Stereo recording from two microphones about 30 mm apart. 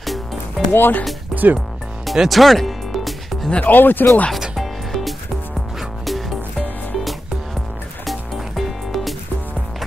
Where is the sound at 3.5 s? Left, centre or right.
Left.